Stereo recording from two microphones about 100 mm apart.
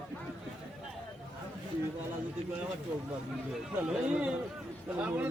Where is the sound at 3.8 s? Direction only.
10° right (ahead or behind).